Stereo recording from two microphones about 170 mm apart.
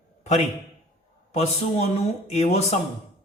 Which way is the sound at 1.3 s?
40° left (ahead or behind).